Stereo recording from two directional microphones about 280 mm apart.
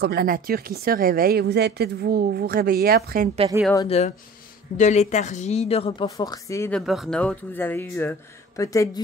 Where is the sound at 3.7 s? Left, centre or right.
Centre.